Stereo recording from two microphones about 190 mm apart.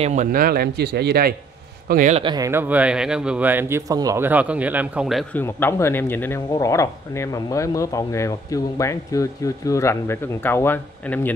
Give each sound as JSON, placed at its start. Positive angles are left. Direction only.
{"t": 0.0, "sound": "speech", "side_deg": -40}
{"t": 1.9, "sound": "speech", "side_deg": -45}
{"t": 2.1, "sound": "speech", "side_deg": -20}
{"t": 5.3, "sound": "speech", "side_deg": 10}